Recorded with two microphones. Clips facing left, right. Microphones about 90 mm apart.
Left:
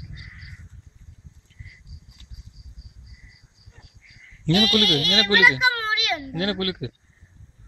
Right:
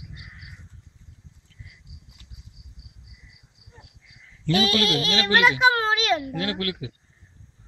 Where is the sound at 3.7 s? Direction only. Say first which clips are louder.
Right 2 dB; 25° right (ahead or behind).